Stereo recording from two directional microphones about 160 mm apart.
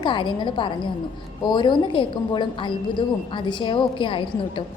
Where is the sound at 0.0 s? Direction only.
30° left (ahead or behind).